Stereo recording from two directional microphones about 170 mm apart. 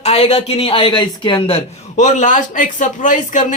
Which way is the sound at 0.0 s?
35° left (ahead or behind).